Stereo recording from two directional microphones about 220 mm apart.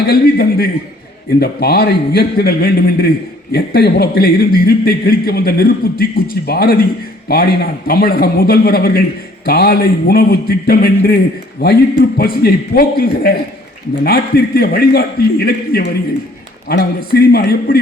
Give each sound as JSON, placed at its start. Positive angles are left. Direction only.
{"t": 0.1, "sound": "a man's voice", "side_deg": 45}